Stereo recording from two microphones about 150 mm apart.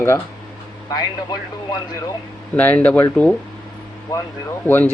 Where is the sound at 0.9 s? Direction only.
25° left (ahead or behind).